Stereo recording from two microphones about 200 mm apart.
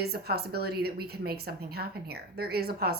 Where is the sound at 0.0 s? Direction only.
50° right (ahead or behind).